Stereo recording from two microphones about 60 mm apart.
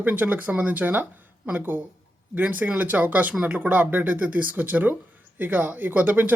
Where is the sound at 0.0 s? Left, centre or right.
Right.